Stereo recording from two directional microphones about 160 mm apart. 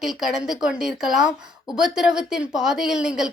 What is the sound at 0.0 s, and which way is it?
A woman's voice, centre (ahead or behind).